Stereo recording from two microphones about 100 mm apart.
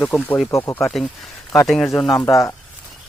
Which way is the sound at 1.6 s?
5° left (ahead or behind).